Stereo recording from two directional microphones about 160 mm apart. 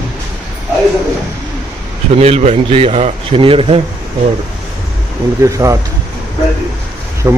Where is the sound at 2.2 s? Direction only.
40° right (ahead or behind).